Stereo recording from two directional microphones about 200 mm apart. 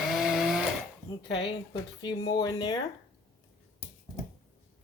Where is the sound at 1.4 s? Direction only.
20° left (ahead or behind).